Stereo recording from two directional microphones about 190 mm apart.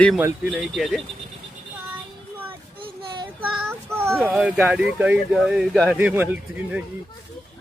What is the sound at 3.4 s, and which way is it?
Child singing, 15° right (ahead or behind).